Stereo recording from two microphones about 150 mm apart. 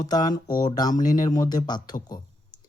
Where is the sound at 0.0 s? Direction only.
25° left (ahead or behind).